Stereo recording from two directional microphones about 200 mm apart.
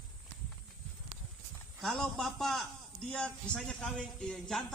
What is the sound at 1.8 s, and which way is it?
A man's voice, centre (ahead or behind).